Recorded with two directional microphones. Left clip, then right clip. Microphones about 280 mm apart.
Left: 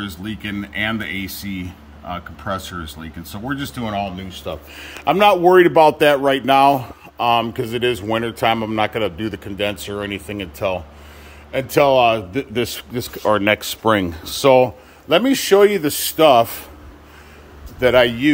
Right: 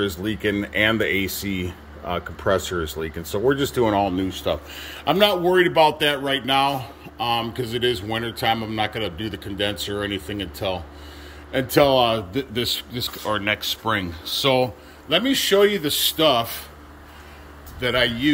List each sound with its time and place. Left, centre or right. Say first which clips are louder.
0.2 s speech: right 4 dB; centre
4.7 s a man's voice: left 5 dB; centre
5.8 s a man's voice: left 6 dB; left
12.7 s speech: even; centre
17.7 s a man's voice: left 7 dB; centre